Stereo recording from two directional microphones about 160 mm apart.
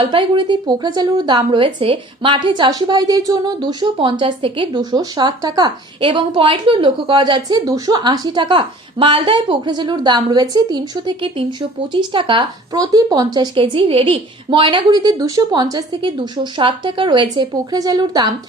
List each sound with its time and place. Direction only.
0.0 s a woman's voice: 35° right (ahead or behind)